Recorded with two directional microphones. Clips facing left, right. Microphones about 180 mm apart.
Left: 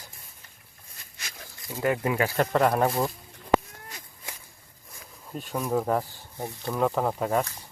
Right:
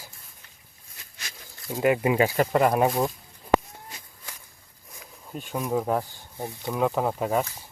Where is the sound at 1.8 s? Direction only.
15° right (ahead or behind).